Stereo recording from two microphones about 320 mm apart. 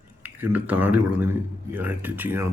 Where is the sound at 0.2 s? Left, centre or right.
Centre.